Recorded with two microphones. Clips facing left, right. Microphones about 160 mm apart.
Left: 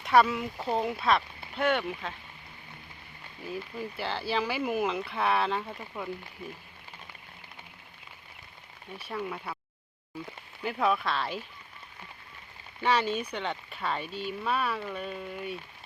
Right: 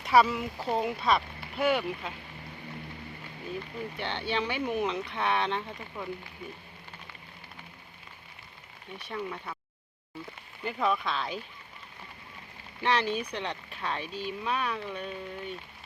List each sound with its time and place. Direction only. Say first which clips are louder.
0.0 s speech: even; centre (ahead or behind)
3.9 s speech: left 1 dB; centre (ahead or behind)
9.0 s speech: left 1 dB; centre (ahead or behind)
10.6 s speech: left 1 dB; 5° left (ahead or behind)
12.8 s speech: left 1 dB; centre (ahead or behind)